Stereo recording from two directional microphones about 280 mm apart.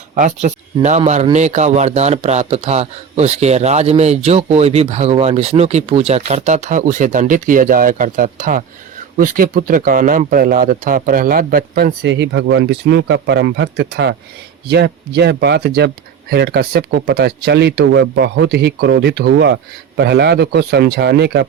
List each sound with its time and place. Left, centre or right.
0.1 s speech: right